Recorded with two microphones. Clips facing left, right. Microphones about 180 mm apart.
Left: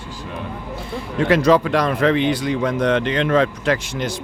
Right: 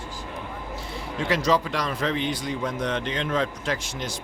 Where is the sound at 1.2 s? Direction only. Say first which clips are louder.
Left 8 dB; 55° left (ahead or behind).